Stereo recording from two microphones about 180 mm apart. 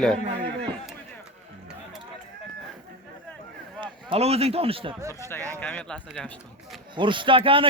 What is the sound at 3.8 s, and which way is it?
A man's voice, 30° right (ahead or behind).